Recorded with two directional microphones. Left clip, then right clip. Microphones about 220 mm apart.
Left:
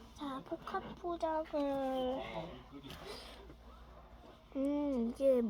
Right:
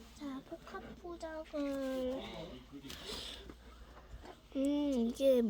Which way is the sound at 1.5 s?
35° right (ahead or behind).